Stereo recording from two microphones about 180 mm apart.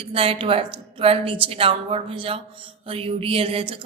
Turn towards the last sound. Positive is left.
turn(degrees=-30)  # may be behind; listen again after turning